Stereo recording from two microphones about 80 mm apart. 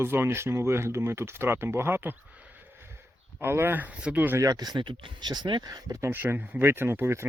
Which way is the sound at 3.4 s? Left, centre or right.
Right.